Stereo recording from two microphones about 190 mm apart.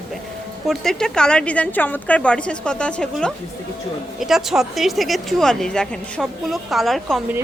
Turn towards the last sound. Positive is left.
turn(degrees=0)  # may be behind; listen again after turning